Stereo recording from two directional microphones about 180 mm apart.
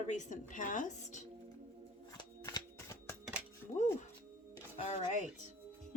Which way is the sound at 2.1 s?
20° left (ahead or behind).